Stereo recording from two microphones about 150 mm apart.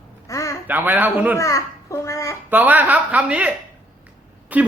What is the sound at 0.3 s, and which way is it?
Quack, 20° left (ahead or behind).